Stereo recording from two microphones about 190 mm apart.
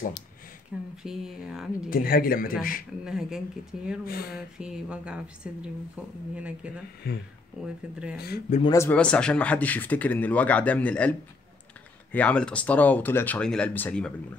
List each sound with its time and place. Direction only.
0.7 s speech: 5° right (ahead or behind)
1.9 s speech: 50° left (ahead or behind)
3.0 s speech: 5° right (ahead or behind)
4.0 s speech: 55° left (ahead or behind)
4.6 s speech: 5° right (ahead or behind)
7.0 s speech: 55° left (ahead or behind)
7.6 s speech: 5° right (ahead or behind)
8.6 s speech: 15° left (ahead or behind)